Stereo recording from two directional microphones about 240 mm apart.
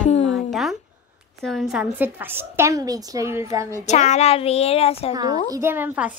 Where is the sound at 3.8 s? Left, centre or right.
Left.